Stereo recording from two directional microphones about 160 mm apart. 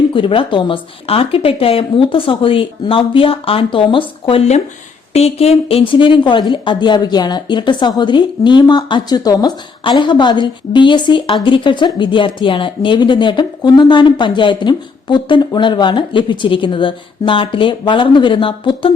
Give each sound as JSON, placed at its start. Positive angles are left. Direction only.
{"t": 0.1, "sound": "a woman's voice", "side_deg": 30}